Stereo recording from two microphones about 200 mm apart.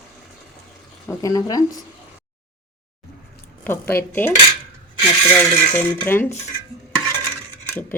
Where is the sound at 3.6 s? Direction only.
10° left (ahead or behind).